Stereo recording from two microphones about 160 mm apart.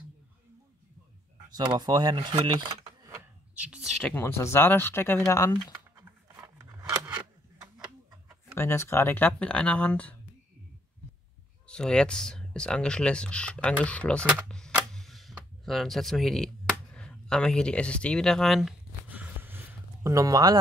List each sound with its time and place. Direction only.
1.5 s speech: 25° right (ahead or behind)
2.6 s a sound: 25° right (ahead or behind)
4.0 s speech: 15° left (ahead or behind)
6.6 s scissors: 15° right (ahead or behind)
8.5 s speech: 15° left (ahead or behind)
11.6 s speech: 5° left (ahead or behind)
14.5 s a sound: 5° left (ahead or behind); by 20.5 s 20° right (ahead or behind)